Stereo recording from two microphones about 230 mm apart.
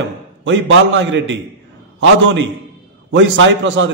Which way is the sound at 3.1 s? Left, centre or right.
Right.